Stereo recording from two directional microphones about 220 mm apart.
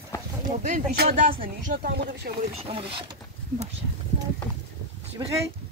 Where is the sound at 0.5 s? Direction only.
35° right (ahead or behind).